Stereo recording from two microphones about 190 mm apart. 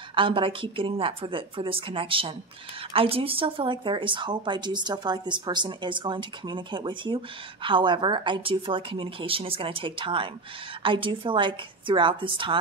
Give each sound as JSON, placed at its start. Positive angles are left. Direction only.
{"t": 0.1, "sound": "a woman's voice", "side_deg": -25}